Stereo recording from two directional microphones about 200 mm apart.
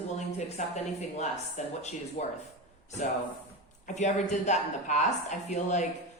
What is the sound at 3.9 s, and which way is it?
A woman's voice, 35° left (ahead or behind).